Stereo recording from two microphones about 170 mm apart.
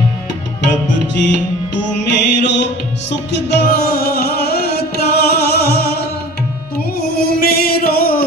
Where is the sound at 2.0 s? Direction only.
90° left; by 6.0 s 65° left (ahead or behind).